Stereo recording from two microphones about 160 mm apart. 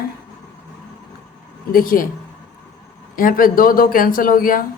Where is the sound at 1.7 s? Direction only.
60° left (ahead or behind).